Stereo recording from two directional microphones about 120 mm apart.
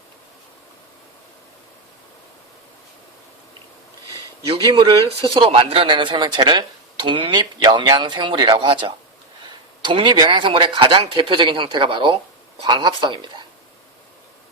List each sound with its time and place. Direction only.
4.4 s speech: 50° right (ahead or behind)
4.7 s speech: 40° right (ahead or behind)
5.0 s speech: 50° right (ahead or behind)